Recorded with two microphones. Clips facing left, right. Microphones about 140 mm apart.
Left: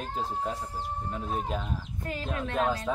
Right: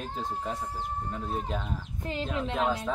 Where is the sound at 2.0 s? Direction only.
20° right (ahead or behind).